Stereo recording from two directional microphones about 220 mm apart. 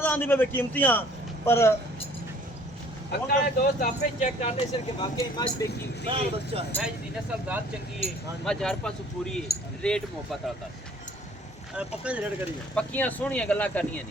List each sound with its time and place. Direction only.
0.0 s speech: 10° left (ahead or behind)
3.1 s speech: 45° left (ahead or behind); by 5.6 s 20° left (ahead or behind)
6.1 s speech: 25° right (ahead or behind)
6.7 s speech: 5° left (ahead or behind)
8.4 s speech: 5° left (ahead or behind)
11.7 s speech: 5° right (ahead or behind)
12.7 s speech: 5° left (ahead or behind)